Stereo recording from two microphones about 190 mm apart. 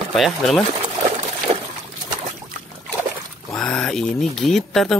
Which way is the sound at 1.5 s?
30° right (ahead or behind).